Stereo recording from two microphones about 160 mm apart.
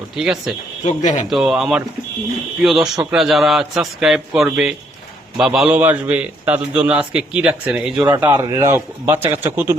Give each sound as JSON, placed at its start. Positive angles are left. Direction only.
{"t": 0.2, "sound": "a man's voice", "side_deg": -5}
{"t": 0.9, "sound": "speech", "side_deg": 50}
{"t": 1.3, "sound": "a man's voice", "side_deg": -5}